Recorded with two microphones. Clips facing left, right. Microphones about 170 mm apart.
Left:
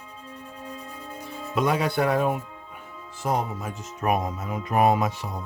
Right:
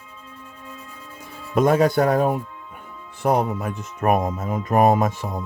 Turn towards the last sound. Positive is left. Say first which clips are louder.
# right 4 dB
turn(degrees=-50)  # may be behind; listen again after turning